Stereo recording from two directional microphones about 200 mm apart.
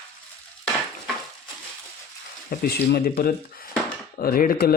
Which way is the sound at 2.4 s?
45° left (ahead or behind).